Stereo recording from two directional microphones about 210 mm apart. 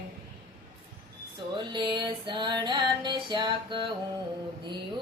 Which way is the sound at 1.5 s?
20° right (ahead or behind).